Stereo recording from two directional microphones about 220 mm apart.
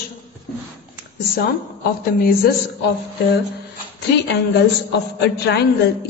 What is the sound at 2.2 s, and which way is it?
Speech, 40° left (ahead or behind).